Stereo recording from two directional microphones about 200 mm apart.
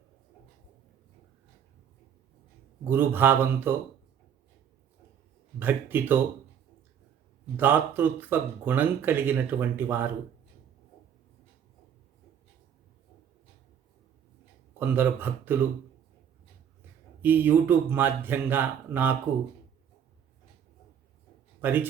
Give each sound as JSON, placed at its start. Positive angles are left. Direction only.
{"t": 2.8, "sound": "speech", "side_deg": -10}
{"t": 5.5, "sound": "speech", "side_deg": -10}
{"t": 7.5, "sound": "speech", "side_deg": -10}
{"t": 14.8, "sound": "speech", "side_deg": -10}
{"t": 17.2, "sound": "speech", "side_deg": -10}
{"t": 21.6, "sound": "a man's voice", "side_deg": -10}